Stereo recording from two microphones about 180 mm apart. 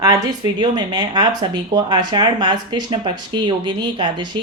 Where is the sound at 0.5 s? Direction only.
25° right (ahead or behind).